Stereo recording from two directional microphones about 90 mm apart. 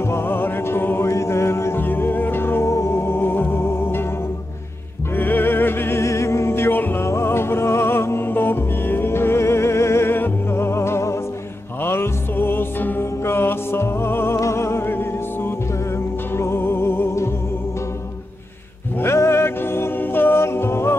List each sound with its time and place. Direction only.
0.0 s music: 25° left (ahead or behind)
5.1 s music: 20° left (ahead or behind)
18.9 s music: 30° left (ahead or behind)